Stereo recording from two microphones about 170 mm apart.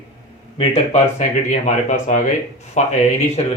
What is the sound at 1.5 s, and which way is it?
Speech, 45° left (ahead or behind).